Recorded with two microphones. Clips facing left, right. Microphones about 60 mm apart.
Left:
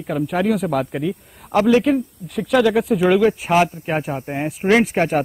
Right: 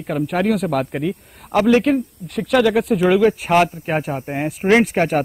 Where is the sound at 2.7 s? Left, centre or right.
Centre.